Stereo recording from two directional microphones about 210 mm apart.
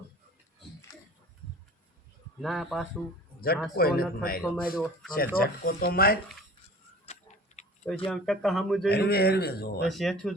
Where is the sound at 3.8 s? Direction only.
45° left (ahead or behind).